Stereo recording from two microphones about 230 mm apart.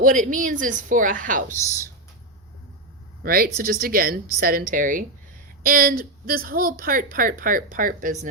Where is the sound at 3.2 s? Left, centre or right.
Right.